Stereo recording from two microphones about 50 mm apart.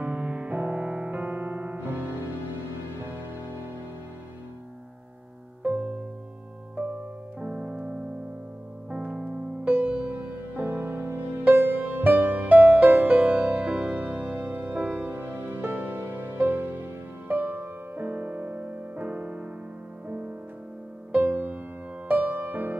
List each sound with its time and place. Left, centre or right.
0.0 s music: right
5.6 s music: right
6.8 s keyboard: right
7.3 s keyboard: right
8.9 s music: right
9.7 s music: right
15.0 s music: right